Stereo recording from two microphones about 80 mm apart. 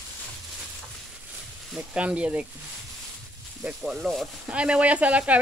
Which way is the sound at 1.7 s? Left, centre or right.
Centre.